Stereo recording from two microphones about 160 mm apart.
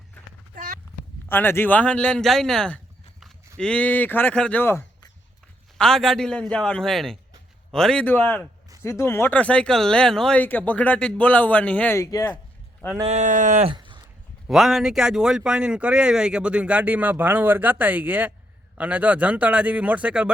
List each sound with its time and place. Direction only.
0.5 s a sound: 60° right (ahead or behind)
1.3 s speech: 15° left (ahead or behind)
5.7 s a man's voice: 5° left (ahead or behind); by 12.4 s 20° left (ahead or behind)
13.1 s speech: 50° right (ahead or behind)
13.7 s a sound: 30° right (ahead or behind)
14.4 s speech: centre (ahead or behind)